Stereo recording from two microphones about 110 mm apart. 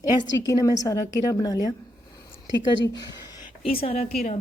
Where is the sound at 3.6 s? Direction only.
60° left (ahead or behind).